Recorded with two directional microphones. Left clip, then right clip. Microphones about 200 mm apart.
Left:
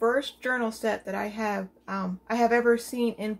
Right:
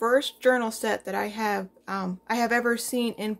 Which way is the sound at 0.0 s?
55° right (ahead or behind).